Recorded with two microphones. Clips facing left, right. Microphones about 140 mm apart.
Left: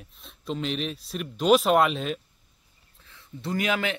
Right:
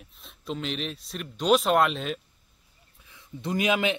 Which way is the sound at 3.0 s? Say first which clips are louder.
Right 1 dB; 15° right (ahead or behind).